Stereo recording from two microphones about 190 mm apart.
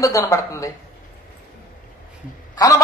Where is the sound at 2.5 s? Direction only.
15° left (ahead or behind).